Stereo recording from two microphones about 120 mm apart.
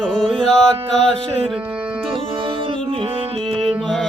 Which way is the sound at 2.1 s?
45° right (ahead or behind).